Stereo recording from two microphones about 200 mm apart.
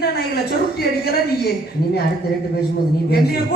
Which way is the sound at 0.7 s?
50° left (ahead or behind).